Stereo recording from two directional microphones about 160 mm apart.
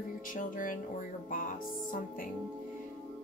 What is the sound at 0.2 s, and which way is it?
Speech, 55° left (ahead or behind).